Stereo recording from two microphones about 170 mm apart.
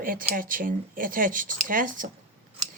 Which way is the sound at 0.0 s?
55° right (ahead or behind).